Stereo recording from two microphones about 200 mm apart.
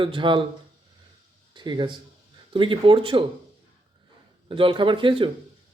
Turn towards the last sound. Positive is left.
turn(degrees=-25)  # may be behind; listen again after turning